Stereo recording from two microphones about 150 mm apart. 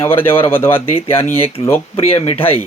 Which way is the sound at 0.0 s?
15° left (ahead or behind).